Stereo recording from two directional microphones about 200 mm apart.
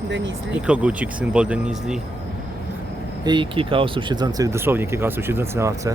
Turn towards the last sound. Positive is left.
turn(degrees=-15)  # may be behind; listen again after turning